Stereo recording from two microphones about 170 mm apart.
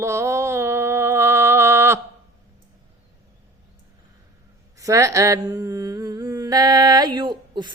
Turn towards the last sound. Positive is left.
turn(degrees=-25)  # may be behind; listen again after turning